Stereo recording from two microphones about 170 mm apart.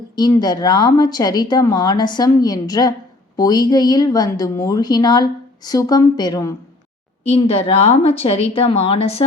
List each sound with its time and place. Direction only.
0.2 s a woman's voice: 25° left (ahead or behind)
7.3 s a woman's voice: 35° left (ahead or behind)